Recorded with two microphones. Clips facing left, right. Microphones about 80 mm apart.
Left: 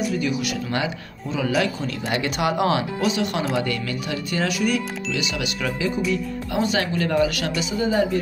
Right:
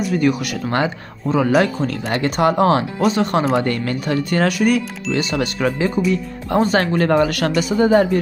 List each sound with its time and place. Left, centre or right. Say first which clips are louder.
0.1 s speech: right 6 dB; right